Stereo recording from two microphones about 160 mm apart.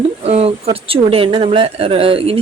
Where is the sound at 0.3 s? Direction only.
40° right (ahead or behind).